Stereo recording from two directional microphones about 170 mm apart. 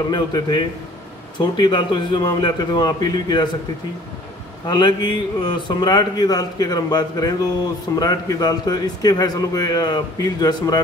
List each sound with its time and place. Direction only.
0.1 s a man's voice: 25° left (ahead or behind)
4.6 s a man's voice: 25° left (ahead or behind)